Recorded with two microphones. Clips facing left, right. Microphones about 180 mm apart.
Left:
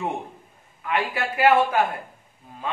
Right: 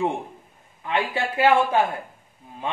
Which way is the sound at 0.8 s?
25° right (ahead or behind).